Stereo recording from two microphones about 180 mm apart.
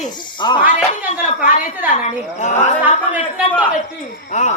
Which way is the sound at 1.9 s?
40° left (ahead or behind).